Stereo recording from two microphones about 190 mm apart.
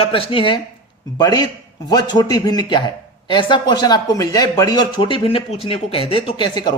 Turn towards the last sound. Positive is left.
turn(degrees=25)  # may be behind; listen again after turning